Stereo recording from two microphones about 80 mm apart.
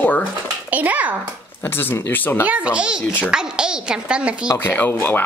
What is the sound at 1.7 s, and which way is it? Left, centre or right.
Speech, left.